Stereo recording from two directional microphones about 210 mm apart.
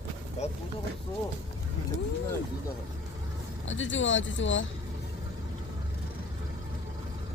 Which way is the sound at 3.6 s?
65° left (ahead or behind).